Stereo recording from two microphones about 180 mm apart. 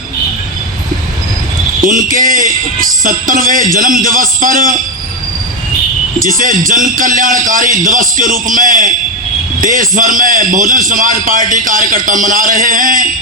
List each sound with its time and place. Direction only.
1.8 s a man's voice: 45° right (ahead or behind)
6.2 s a man's voice: 50° right (ahead or behind)